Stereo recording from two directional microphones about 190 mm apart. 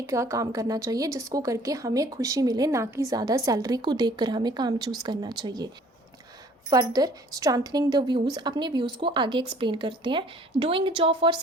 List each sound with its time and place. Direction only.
0.0 s a woman's voice: 15° right (ahead or behind)
6.7 s a woman's voice: 20° right (ahead or behind)